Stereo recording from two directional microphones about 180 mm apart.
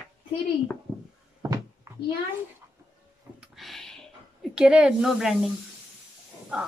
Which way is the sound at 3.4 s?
Centre (ahead or behind).